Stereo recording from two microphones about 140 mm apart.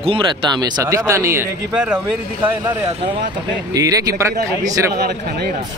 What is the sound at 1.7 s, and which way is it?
Speech, 5° right (ahead or behind).